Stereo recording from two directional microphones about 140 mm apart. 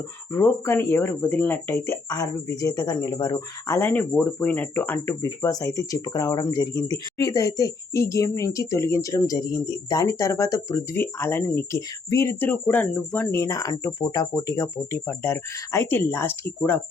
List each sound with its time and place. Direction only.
0.3 s speech: 15° left (ahead or behind); by 3.4 s 30° left (ahead or behind)
3.7 s speech: 15° left (ahead or behind)